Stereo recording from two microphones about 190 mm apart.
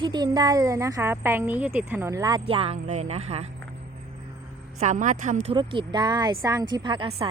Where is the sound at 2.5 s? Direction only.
30° right (ahead or behind).